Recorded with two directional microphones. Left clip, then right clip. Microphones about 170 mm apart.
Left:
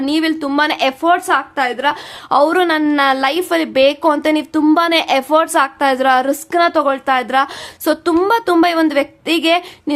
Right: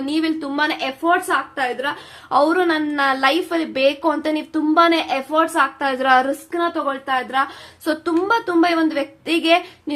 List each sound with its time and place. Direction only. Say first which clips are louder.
0.0 s a woman's voice: left 5 dB; 25° left (ahead or behind)
6.5 s a woman's voice: left 8 dB; 50° left (ahead or behind); by 9.9 s 30° left (ahead or behind)